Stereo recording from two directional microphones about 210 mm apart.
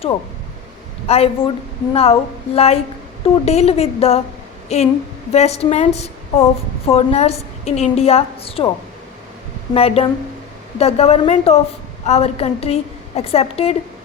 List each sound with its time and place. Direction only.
1.0 s a woman's voice: 30° left (ahead or behind)
9.7 s a woman's voice: 30° left (ahead or behind)